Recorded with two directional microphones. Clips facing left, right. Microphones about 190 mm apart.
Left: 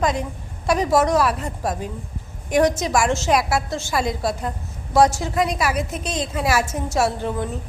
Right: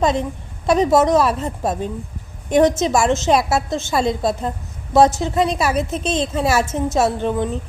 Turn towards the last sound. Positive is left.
turn(degrees=-20)  # may be behind; listen again after turning